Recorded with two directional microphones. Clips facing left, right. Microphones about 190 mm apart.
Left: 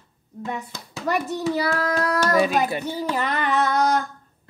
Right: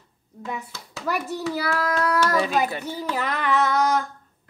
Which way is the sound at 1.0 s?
5° right (ahead or behind).